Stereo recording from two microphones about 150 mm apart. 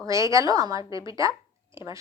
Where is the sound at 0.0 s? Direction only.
20° right (ahead or behind).